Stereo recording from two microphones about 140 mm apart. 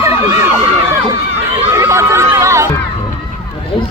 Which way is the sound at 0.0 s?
15° right (ahead or behind).